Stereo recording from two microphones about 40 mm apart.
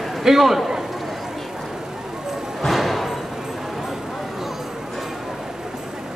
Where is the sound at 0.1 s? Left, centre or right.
Centre.